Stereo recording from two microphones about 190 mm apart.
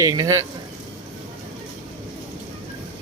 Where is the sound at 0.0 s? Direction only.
20° right (ahead or behind).